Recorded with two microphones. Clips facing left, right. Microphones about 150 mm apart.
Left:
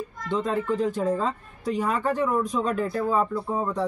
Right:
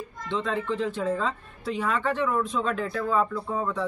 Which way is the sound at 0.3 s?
40° left (ahead or behind).